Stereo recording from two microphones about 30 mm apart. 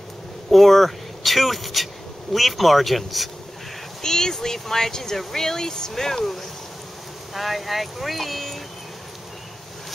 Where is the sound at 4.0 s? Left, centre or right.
Centre.